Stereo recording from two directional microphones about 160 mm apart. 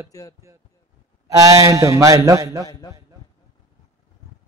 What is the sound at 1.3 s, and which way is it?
A man's voice, 20° right (ahead or behind).